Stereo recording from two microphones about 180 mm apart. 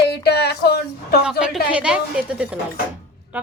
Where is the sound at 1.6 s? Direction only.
5° right (ahead or behind).